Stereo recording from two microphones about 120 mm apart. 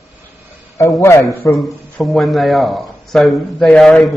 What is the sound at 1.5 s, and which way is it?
Speech, centre (ahead or behind).